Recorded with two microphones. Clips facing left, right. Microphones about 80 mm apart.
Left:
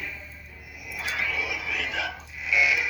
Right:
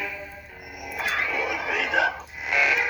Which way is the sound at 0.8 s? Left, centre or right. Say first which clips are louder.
Right 4 dB; right.